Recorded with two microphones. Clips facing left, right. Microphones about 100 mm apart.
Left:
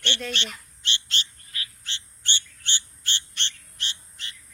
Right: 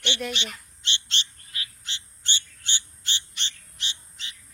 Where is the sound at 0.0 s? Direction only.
15° right (ahead or behind).